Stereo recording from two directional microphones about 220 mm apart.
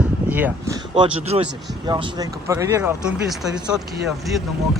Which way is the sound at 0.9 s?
25° right (ahead or behind).